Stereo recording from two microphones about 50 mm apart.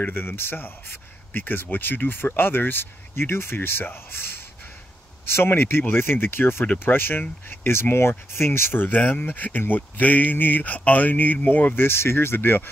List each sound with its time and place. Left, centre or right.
0.0 s speech: left